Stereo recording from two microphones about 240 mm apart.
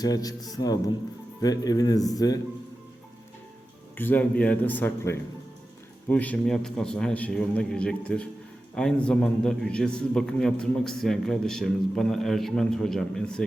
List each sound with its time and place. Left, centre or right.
0.0 s a man's voice: centre
3.9 s a man's voice: centre